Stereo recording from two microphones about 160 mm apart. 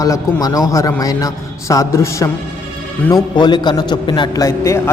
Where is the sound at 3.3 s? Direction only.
30° left (ahead or behind).